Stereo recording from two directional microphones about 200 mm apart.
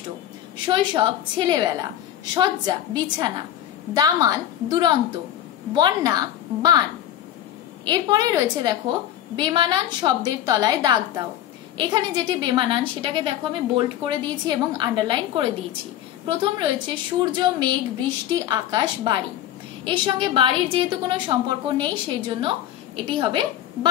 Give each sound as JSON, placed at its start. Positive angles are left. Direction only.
{"t": 0.7, "sound": "a woman's voice", "side_deg": -20}
{"t": 7.8, "sound": "a woman's voice", "side_deg": -20}
{"t": 23.0, "sound": "a woman's voice", "side_deg": -25}